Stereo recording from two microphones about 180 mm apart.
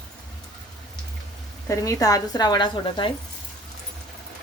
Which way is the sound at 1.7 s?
20° left (ahead or behind).